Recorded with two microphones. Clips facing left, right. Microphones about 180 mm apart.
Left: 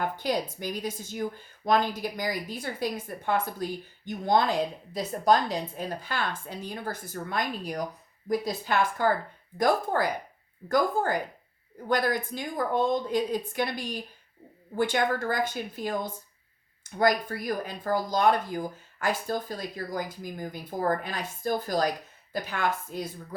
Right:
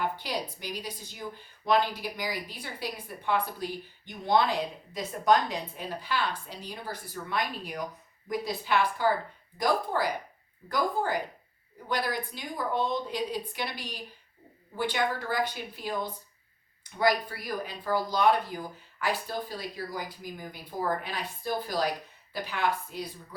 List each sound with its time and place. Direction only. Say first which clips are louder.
0.0 s speech: left 4 dB; 50° left (ahead or behind)